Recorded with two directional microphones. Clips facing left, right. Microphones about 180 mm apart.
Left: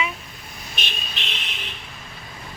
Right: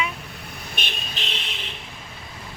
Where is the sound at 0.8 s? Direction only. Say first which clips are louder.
Even; 55° right (ahead or behind).